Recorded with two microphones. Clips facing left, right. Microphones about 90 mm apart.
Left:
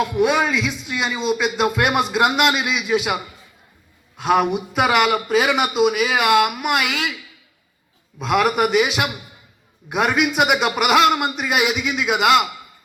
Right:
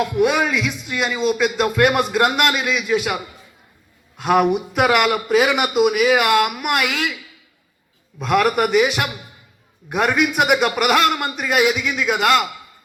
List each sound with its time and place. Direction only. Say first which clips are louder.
0.0 s a man's voice: even; centre (ahead or behind)
4.2 s a man's voice: right 2 dB; centre (ahead or behind)
8.2 s a man's voice: right 1 dB; 5° left (ahead or behind)